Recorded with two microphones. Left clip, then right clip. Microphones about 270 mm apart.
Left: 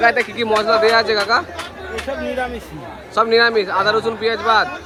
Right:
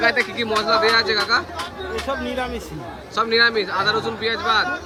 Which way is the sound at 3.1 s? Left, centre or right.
Centre.